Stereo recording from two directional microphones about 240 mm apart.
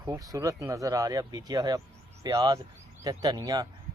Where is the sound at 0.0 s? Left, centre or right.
Centre.